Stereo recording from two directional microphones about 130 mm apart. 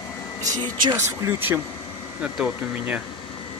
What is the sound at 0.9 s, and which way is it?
Speech, 20° right (ahead or behind).